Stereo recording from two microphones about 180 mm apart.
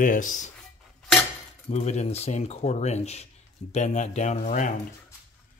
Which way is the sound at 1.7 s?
40° left (ahead or behind).